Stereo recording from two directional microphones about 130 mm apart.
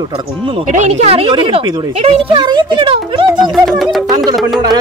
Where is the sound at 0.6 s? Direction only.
65° right (ahead or behind); by 2.1 s 50° right (ahead or behind).